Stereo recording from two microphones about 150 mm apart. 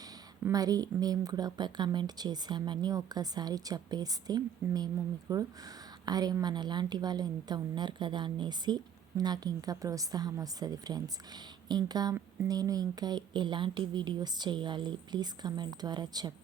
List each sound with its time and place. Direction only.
0.4 s a woman's voice: 25° right (ahead or behind)